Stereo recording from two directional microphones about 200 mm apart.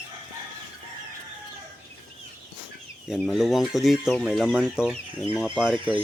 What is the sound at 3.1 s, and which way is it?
Speech, centre (ahead or behind).